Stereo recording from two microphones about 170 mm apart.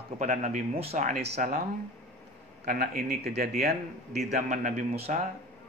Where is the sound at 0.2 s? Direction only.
45° right (ahead or behind).